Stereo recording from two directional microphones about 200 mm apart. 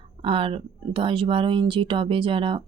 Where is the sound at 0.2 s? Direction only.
25° right (ahead or behind).